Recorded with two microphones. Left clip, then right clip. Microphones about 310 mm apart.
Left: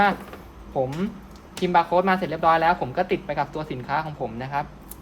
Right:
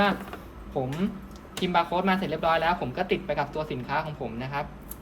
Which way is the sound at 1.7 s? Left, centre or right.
Left.